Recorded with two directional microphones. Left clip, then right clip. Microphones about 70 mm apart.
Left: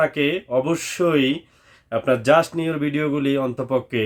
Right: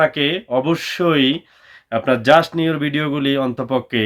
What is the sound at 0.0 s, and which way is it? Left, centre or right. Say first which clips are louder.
Speech: right 3 dB; left.